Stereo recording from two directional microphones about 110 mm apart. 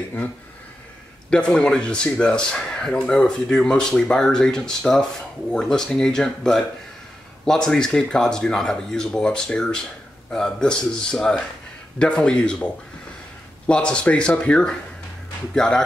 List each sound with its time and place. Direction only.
1.3 s speech: 10° left (ahead or behind)
13.7 s speech: 10° left (ahead or behind)